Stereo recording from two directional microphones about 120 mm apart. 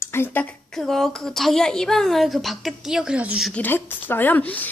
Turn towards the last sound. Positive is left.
turn(degrees=15)  # may be behind; listen again after turning